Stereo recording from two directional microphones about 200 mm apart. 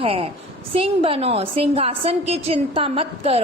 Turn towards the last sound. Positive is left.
turn(degrees=-30)  # may be behind; listen again after turning